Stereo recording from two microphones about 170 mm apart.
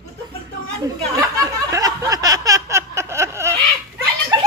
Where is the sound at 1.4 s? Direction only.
20° right (ahead or behind).